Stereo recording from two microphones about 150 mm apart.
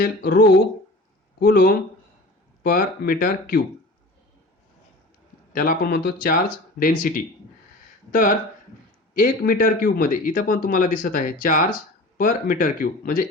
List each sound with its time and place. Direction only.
0.0 s speech: 90° left
2.6 s speech: 75° left (ahead or behind)
5.5 s speech: 85° left